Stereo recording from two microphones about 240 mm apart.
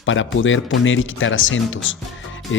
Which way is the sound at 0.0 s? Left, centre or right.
Left.